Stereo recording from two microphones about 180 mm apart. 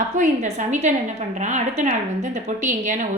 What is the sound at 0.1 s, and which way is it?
A woman's voice, 45° right (ahead or behind).